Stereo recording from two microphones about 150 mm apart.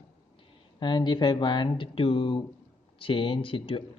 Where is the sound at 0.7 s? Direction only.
30° left (ahead or behind).